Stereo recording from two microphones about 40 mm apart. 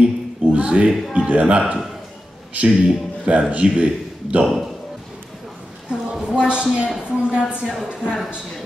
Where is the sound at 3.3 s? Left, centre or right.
Right.